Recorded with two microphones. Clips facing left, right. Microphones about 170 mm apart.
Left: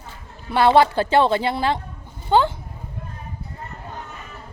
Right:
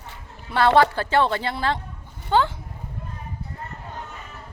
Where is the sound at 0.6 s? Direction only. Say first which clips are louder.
Left 2 dB; 15° left (ahead or behind).